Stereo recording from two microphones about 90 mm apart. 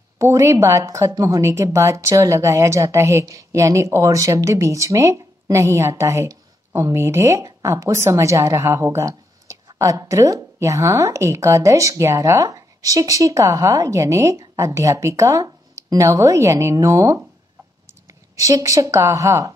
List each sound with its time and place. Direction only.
0.2 s a woman's voice: 35° right (ahead or behind)